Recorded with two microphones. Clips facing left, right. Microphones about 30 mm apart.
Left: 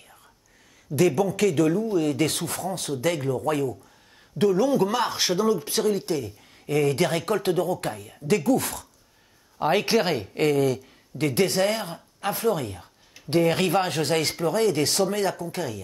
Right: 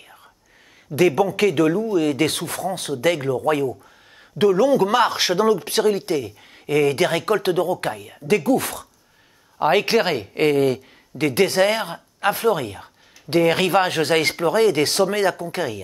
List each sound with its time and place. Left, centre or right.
0.9 s speech: right
2.3 s speech: right
9.6 s speech: centre
10.4 s speech: right
10.8 s speech: right